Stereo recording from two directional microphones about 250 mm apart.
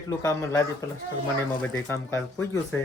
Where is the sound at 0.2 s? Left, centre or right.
Centre.